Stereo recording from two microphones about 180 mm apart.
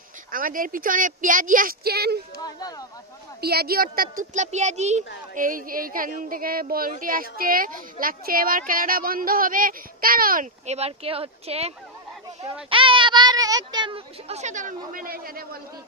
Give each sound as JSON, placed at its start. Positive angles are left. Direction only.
{"t": 0.3, "sound": "speech", "side_deg": -50}
{"t": 3.3, "sound": "speech", "side_deg": -60}
{"t": 5.3, "sound": "speech", "side_deg": -50}